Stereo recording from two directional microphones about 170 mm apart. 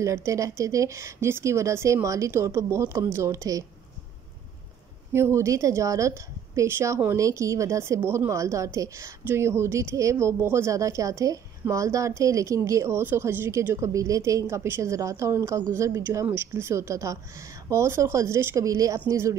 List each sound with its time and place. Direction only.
0.0 s a woman's voice: 15° right (ahead or behind)
5.1 s a woman's voice: 15° right (ahead or behind)